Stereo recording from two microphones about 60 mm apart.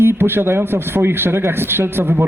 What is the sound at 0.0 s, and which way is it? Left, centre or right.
A man's voice, right.